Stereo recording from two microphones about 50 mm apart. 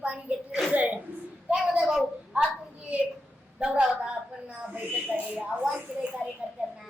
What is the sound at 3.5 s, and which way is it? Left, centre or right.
A woman's voice, right.